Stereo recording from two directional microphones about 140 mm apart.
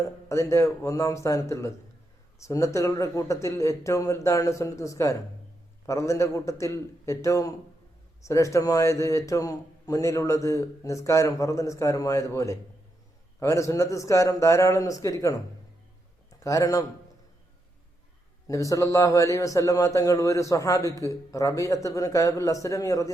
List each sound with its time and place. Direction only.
0.3 s a man's voice: 20° left (ahead or behind)
18.4 s a man's voice: 25° left (ahead or behind)